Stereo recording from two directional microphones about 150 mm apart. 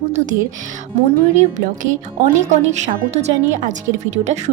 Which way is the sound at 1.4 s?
55° right (ahead or behind).